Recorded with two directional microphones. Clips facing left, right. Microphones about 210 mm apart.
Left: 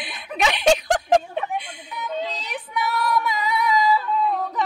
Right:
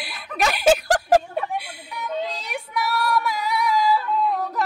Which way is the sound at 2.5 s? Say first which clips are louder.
Even; 10° right (ahead or behind).